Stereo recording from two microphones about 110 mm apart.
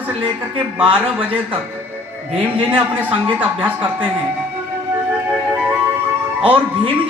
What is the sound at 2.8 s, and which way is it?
A man's voice, 15° right (ahead or behind).